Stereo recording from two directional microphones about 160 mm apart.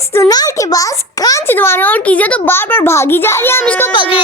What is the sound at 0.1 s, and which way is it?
A child's voice, 20° left (ahead or behind).